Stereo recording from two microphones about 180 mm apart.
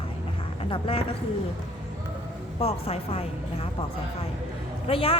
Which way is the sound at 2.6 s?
35° left (ahead or behind).